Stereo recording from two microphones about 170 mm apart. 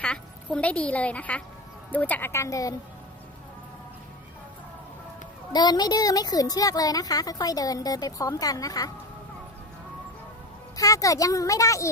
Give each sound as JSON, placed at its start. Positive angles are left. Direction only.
{"t": 0.0, "sound": "a woman's voice", "side_deg": 5}
{"t": 5.5, "sound": "speech", "side_deg": 25}
{"t": 10.8, "sound": "speech", "side_deg": 20}